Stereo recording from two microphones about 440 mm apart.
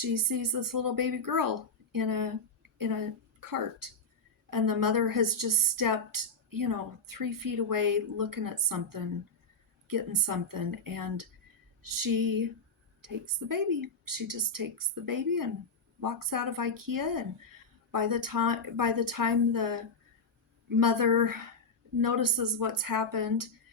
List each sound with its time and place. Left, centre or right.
0.0 s a woman's voice: right